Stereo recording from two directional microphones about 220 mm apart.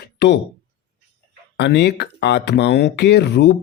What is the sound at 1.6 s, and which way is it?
Speech, 50° left (ahead or behind).